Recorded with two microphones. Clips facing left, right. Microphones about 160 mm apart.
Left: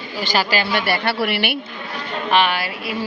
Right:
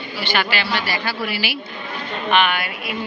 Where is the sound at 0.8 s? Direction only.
65° left (ahead or behind).